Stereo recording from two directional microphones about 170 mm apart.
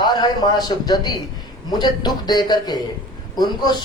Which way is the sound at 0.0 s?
25° left (ahead or behind).